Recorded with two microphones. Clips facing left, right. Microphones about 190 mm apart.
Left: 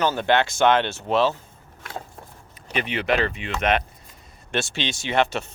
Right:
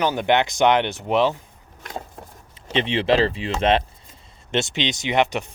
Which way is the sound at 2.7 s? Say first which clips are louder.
Right 4 dB; 25° right (ahead or behind).